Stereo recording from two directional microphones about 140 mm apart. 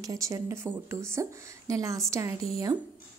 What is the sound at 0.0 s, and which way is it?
A woman's voice, 25° right (ahead or behind).